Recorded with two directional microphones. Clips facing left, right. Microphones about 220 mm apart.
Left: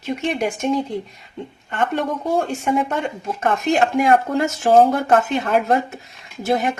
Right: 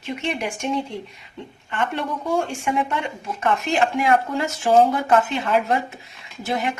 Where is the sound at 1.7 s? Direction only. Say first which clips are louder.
Left 4 dB; 40° left (ahead or behind).